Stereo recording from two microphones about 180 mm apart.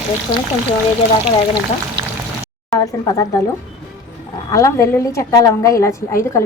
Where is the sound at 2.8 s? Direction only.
20° left (ahead or behind).